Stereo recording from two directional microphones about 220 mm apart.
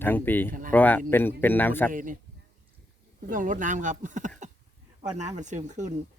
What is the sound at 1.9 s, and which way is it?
Speech, 35° right (ahead or behind).